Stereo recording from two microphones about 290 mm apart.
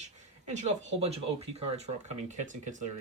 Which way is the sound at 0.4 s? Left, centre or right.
Right.